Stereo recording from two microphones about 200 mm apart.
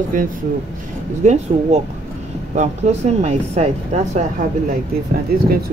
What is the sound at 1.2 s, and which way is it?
Speech, 35° right (ahead or behind).